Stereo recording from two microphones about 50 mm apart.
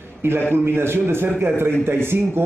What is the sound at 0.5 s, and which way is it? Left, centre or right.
Speech, right.